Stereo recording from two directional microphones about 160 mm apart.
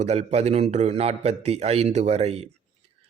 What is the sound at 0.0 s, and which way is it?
Speech, 40° right (ahead or behind).